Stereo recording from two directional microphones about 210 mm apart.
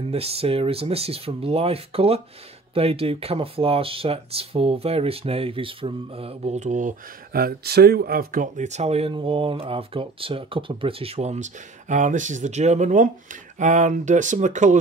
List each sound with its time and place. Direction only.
0.1 s speech: 30° right (ahead or behind)